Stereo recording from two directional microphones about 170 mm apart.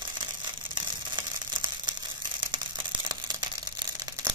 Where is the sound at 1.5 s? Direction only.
25° right (ahead or behind).